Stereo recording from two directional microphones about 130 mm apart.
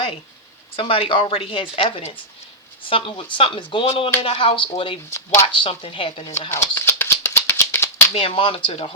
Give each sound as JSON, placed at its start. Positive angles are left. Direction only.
{"t": 0.8, "sound": "a woman's voice", "side_deg": 45}
{"t": 5.1, "sound": "speech", "side_deg": 20}
{"t": 5.5, "sound": "speech", "side_deg": 40}
{"t": 6.5, "sound": "rattle", "side_deg": 20}
{"t": 8.1, "sound": "a woman's voice", "side_deg": 45}